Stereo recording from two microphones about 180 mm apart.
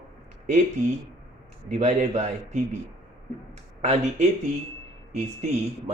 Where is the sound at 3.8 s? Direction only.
40° right (ahead or behind).